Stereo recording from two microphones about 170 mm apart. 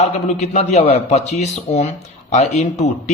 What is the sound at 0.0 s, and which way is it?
Speech, 40° left (ahead or behind).